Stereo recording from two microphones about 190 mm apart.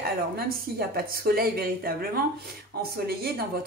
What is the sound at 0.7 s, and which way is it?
A woman's voice, 55° right (ahead or behind).